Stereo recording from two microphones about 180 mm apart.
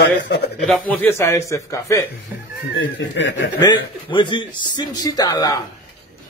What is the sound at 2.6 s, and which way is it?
Speech, 90° left.